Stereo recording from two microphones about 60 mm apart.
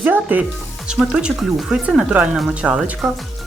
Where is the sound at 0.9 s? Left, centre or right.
Centre.